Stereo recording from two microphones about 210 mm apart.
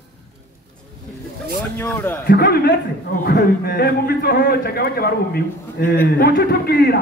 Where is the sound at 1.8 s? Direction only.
10° left (ahead or behind).